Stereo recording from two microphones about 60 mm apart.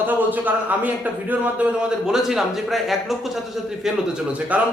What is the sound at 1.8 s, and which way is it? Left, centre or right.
A man's voice, centre.